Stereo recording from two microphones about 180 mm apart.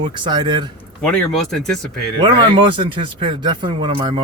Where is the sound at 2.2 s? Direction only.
25° right (ahead or behind).